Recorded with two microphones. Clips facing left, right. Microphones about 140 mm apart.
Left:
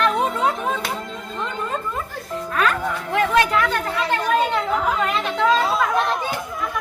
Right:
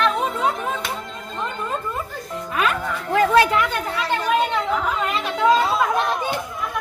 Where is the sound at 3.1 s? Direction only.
30° right (ahead or behind).